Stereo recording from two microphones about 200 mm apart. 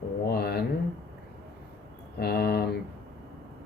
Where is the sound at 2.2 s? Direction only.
50° left (ahead or behind).